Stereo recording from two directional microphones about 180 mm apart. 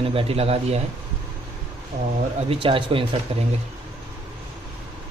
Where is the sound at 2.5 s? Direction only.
30° right (ahead or behind).